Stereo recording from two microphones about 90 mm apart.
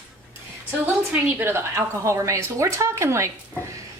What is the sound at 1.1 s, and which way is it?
A woman's voice, 25° right (ahead or behind).